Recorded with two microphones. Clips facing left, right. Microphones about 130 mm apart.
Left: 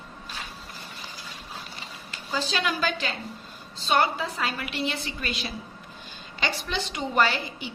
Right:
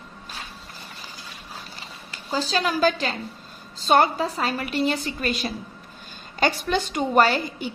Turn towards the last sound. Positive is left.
turn(degrees=-45)  # may be behind; listen again after turning